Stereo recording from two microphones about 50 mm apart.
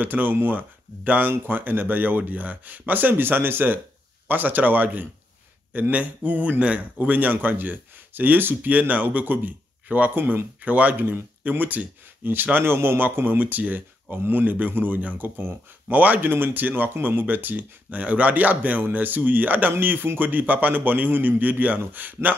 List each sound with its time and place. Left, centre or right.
0.0 s a man's voice: right
7.2 s speech: right
12.5 s speech: right
16.3 s speech: right